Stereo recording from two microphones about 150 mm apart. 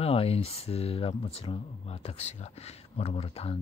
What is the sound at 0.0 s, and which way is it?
Speech, 40° left (ahead or behind).